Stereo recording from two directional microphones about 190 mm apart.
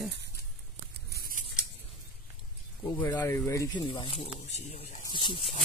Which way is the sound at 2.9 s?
10° left (ahead or behind).